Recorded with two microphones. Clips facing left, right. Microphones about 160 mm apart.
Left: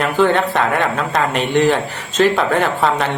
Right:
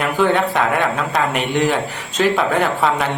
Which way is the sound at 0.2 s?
Centre (ahead or behind).